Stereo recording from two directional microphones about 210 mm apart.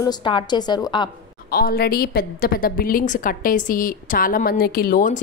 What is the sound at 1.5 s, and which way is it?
A woman's voice, 45° left (ahead or behind).